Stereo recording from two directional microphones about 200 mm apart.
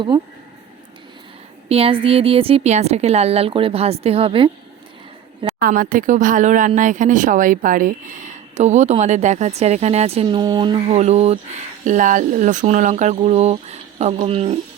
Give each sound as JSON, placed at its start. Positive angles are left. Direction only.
{"t": 1.7, "sound": "a woman's voice", "side_deg": -30}
{"t": 5.5, "sound": "speech", "side_deg": -45}
{"t": 10.2, "sound": "a woman's voice", "side_deg": -20}